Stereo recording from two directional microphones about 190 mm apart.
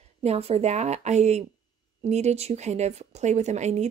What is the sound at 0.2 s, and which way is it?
Speech, 35° right (ahead or behind).